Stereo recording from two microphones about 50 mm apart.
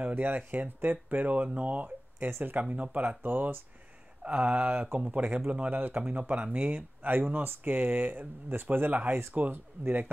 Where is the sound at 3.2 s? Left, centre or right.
Right.